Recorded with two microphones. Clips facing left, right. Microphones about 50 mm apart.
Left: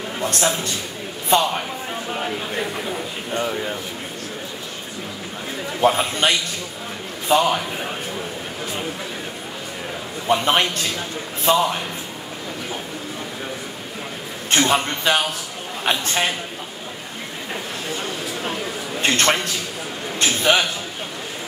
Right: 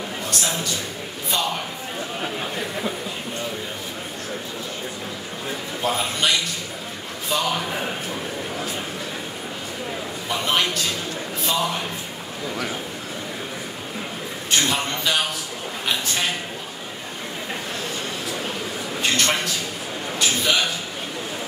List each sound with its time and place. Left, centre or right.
0.2 s a sound: left
1.3 s a man's voice: left
5.8 s a man's voice: left
10.4 s a man's voice: left
14.5 s a man's voice: left
18.9 s a man's voice: left